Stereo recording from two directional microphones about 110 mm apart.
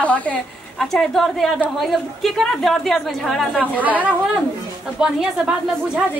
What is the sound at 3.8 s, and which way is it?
A woman's voice, 15° right (ahead or behind).